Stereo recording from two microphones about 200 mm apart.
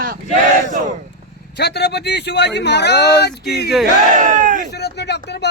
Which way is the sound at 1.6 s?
55° left (ahead or behind).